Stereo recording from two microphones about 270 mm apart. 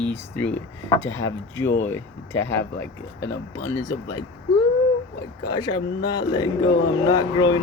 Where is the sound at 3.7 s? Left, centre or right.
Centre.